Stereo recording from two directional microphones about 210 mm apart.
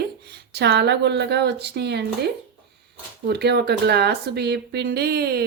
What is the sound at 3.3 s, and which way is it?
Speech, 50° right (ahead or behind).